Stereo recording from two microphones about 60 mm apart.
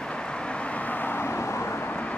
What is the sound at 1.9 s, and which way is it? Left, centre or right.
Vehicle, left.